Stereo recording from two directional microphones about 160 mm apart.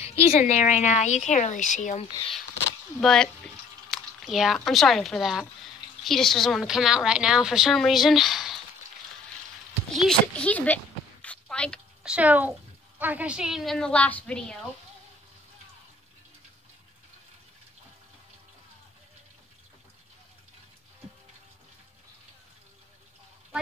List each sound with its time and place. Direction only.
0.0 s speech: 45° left (ahead or behind)
2.0 s speech: 25° left (ahead or behind)
3.0 s a woman's voice: 5° left (ahead or behind)
3.9 s a sound: centre (ahead or behind)
4.6 s a woman's voice: centre (ahead or behind)
9.8 s speech: 5° left (ahead or behind)
11.2 s a sound: 5° left (ahead or behind)
12.0 s a child's voice: 10° right (ahead or behind)